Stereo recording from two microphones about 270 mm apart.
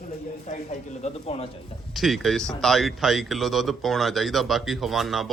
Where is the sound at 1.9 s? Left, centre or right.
Centre.